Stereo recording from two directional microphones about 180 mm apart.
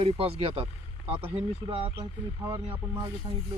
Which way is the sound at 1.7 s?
30° right (ahead or behind).